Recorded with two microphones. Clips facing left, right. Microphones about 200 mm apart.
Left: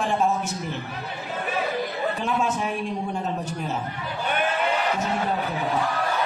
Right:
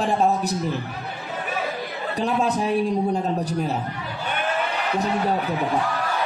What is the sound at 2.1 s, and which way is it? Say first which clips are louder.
A man's voice: right 8 dB; 35° right (ahead or behind).